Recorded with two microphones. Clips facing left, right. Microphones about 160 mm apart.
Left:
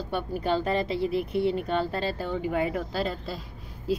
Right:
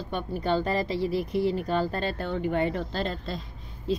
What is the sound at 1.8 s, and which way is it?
Speech, 5° left (ahead or behind).